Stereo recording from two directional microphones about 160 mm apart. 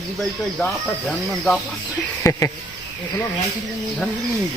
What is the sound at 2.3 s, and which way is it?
Speech, 20° left (ahead or behind).